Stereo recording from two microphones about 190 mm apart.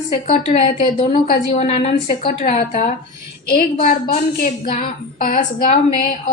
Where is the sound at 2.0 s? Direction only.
50° left (ahead or behind).